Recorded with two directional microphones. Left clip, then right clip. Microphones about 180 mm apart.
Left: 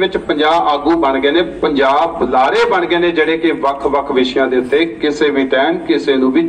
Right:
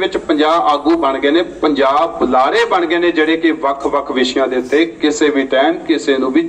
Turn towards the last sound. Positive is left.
turn(degrees=-25)  # may be behind; listen again after turning